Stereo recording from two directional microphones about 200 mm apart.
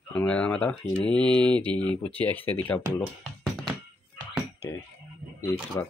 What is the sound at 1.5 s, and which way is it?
Speech, 25° right (ahead or behind).